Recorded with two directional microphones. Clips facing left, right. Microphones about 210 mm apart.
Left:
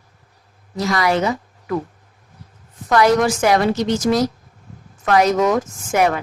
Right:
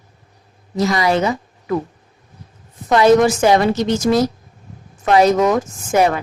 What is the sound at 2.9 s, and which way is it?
Speech, 25° right (ahead or behind).